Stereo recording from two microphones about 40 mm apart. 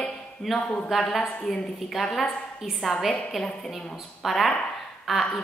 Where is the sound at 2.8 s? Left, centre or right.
Centre.